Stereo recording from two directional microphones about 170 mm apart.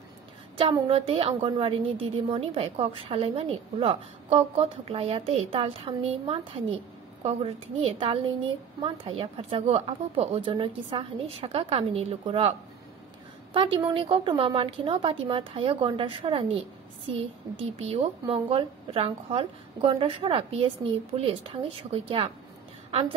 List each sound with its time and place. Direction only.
0.6 s a woman's voice: 30° right (ahead or behind)